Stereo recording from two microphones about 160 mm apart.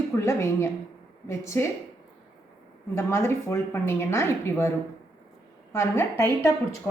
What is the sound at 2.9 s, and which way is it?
A woman's voice, 15° left (ahead or behind).